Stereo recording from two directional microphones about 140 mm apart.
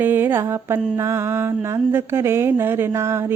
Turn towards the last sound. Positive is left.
turn(degrees=-20)  # may be behind; listen again after turning